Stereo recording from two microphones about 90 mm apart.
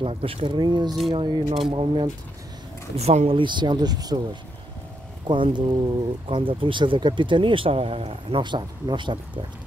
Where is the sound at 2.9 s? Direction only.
90° right.